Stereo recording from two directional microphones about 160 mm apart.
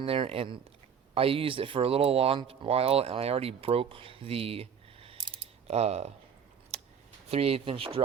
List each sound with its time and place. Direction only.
0.0 s speech: 35° right (ahead or behind)
6.7 s a sound: 40° right (ahead or behind)
7.3 s speech: 35° right (ahead or behind)